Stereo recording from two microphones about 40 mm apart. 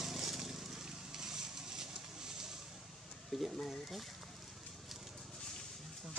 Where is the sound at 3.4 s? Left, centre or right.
Centre.